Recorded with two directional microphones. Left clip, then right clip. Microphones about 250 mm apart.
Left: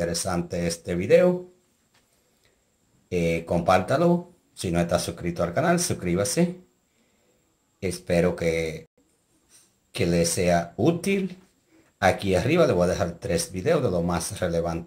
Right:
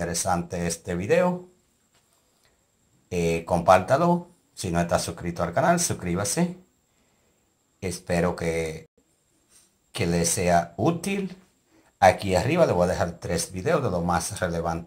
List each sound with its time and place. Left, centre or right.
0.0 s speech: centre
3.1 s speech: centre
7.8 s speech: centre
9.9 s speech: centre
12.2 s speech: centre